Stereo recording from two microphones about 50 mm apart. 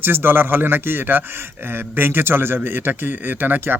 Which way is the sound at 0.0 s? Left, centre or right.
Right.